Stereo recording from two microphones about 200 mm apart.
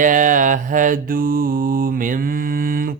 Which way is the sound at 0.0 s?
40° right (ahead or behind).